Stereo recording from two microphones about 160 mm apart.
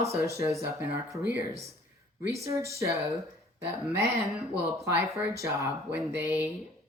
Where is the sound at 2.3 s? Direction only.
20° right (ahead or behind).